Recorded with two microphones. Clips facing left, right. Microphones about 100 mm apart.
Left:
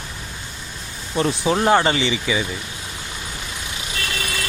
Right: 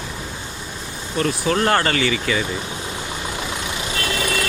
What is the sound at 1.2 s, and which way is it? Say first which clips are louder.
Speech: left 1 dB; 25° left (ahead or behind).